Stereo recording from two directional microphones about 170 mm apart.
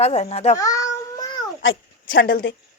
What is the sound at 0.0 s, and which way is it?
Speech, 40° left (ahead or behind).